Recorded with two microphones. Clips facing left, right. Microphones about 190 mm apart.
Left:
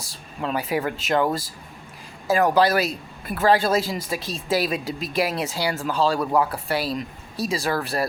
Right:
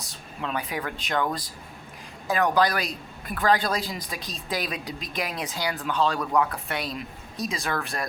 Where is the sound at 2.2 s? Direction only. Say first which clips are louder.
Left 4 dB; 5° left (ahead or behind).